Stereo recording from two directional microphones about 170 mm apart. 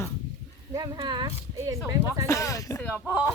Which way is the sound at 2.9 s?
5° right (ahead or behind).